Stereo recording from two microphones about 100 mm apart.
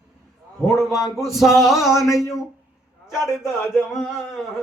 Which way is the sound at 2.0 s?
30° left (ahead or behind).